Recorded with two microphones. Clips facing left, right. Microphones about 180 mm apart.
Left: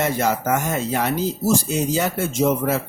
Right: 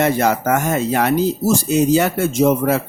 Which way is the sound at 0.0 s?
65° right (ahead or behind).